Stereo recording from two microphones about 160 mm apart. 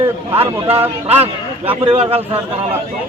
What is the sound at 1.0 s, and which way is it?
Speech, 40° right (ahead or behind).